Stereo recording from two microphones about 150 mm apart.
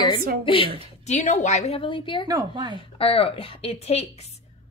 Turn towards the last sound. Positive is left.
turn(degrees=45)  # may be behind; listen again after turning